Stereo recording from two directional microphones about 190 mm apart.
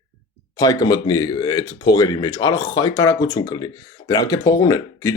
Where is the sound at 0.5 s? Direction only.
20° left (ahead or behind).